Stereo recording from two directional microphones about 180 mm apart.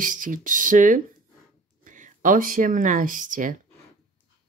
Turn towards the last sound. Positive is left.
turn(degrees=-45)  # may be behind; listen again after turning